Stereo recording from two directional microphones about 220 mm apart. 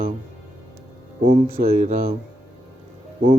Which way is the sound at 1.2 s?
40° right (ahead or behind).